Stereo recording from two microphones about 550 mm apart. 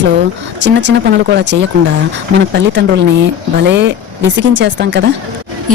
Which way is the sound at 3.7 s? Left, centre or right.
Centre.